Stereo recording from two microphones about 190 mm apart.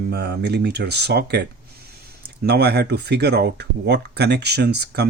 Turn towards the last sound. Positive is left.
turn(degrees=-60)  # may be behind; listen again after turning